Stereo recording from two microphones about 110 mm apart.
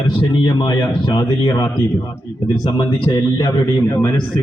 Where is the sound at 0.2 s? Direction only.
45° left (ahead or behind).